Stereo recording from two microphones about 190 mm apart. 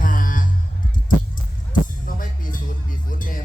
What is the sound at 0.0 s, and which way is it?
Music, 45° left (ahead or behind).